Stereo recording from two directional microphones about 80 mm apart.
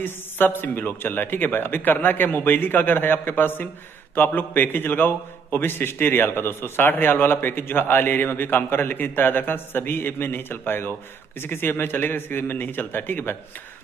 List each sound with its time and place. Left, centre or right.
0.0 s a man's voice: left